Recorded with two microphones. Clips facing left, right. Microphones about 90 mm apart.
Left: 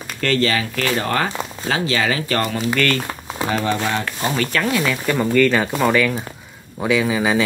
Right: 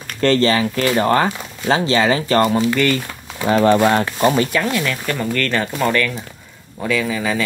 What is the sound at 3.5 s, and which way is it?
Speech, 45° right (ahead or behind).